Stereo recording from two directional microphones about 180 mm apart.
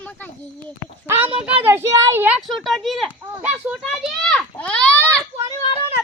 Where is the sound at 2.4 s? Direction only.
Centre (ahead or behind).